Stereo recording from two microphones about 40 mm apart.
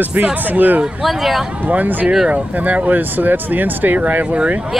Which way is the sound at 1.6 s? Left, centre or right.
Right.